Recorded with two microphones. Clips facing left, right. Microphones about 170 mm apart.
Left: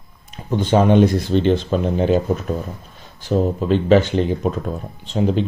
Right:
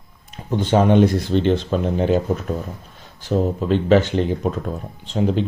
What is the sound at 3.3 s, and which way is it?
Speech, 20° left (ahead or behind).